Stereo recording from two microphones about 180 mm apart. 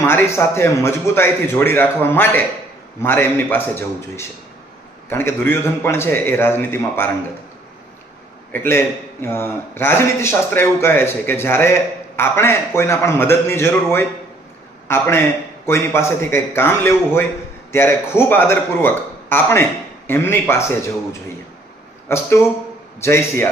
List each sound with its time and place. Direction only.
0.0 s speech: 15° left (ahead or behind)
8.5 s speech: 10° left (ahead or behind)